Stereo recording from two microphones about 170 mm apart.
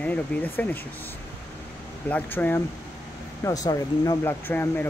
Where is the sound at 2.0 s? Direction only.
10° left (ahead or behind).